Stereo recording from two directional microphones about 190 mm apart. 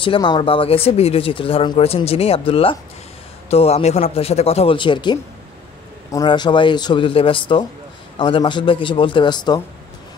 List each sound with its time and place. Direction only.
0.0 s speech: 25° left (ahead or behind)